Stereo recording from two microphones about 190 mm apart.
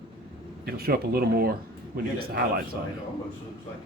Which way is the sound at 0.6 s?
55° right (ahead or behind).